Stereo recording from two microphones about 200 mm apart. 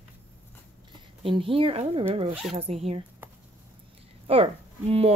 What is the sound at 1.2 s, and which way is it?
A woman's voice, 25° right (ahead or behind).